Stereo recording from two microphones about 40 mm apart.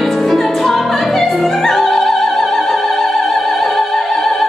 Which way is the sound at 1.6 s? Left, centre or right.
Centre.